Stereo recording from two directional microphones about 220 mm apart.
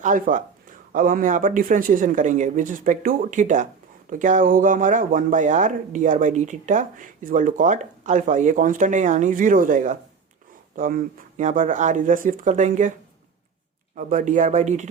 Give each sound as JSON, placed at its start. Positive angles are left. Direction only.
{"t": 0.0, "sound": "speech", "side_deg": -35}
{"t": 13.9, "sound": "speech", "side_deg": -35}